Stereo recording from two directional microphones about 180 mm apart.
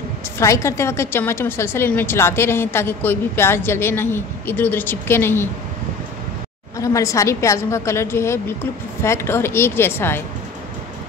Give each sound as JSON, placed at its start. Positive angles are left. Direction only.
{"t": 0.4, "sound": "a woman's voice", "side_deg": 15}
{"t": 6.8, "sound": "a woman's voice", "side_deg": 15}